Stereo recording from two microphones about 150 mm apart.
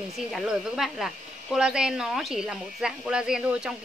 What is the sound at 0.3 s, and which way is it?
A woman's voice, centre (ahead or behind).